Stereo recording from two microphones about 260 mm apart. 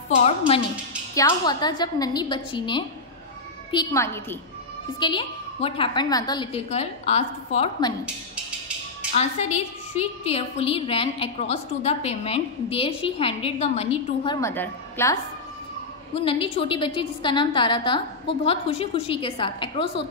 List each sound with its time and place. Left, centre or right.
1.1 s a woman's voice: centre
9.1 s a woman's voice: left; by 15.1 s centre
16.2 s a woman's voice: left